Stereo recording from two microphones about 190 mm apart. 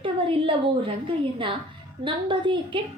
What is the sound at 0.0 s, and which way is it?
A woman's voice, 30° right (ahead or behind).